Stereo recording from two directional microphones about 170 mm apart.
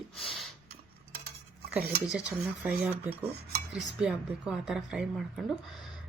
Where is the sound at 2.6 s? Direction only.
10° right (ahead or behind).